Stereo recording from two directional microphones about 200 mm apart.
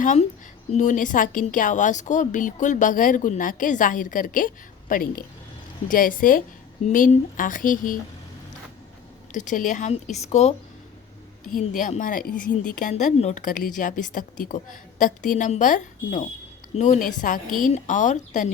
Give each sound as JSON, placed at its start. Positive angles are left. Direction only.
{"t": 0.0, "sound": "a woman's voice", "side_deg": 35}
{"t": 9.3, "sound": "a woman's voice", "side_deg": 40}
{"t": 11.6, "sound": "a woman's voice", "side_deg": 40}